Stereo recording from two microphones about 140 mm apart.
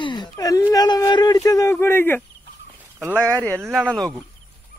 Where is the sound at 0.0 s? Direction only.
30° left (ahead or behind); by 2.2 s 15° left (ahead or behind).